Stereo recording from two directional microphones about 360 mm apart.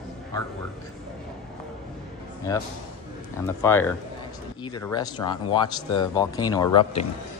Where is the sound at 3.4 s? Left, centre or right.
Centre.